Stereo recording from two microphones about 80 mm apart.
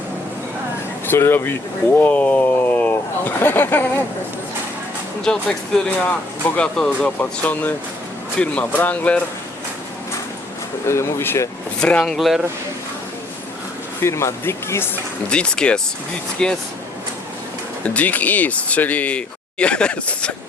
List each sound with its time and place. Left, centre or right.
1.0 s speech: left
5.2 s speech: centre
7.2 s speech: left
10.8 s speech: left
11.8 s speech: centre
12.1 s speech: centre
14.0 s speech: left
15.3 s speech: centre
17.8 s speech: centre